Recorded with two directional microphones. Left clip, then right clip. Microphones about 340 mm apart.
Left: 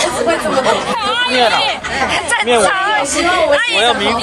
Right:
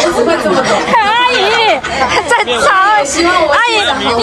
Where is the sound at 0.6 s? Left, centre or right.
Centre.